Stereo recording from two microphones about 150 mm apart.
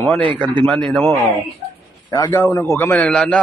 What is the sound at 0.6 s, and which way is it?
Speech, 5° left (ahead or behind).